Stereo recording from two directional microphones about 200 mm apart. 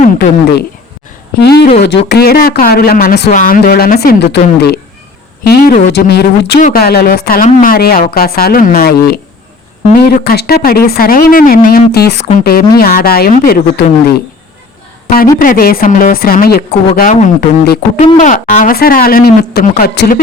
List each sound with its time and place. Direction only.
0.0 s a sound: 45° left (ahead or behind)
2.0 s speech: 50° left (ahead or behind)
6.6 s speech: 45° left (ahead or behind)
15.0 s speech: 45° left (ahead or behind)
18.0 s speech: 40° left (ahead or behind)